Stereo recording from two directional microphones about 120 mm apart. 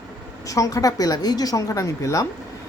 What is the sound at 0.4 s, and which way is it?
Speech, 30° left (ahead or behind).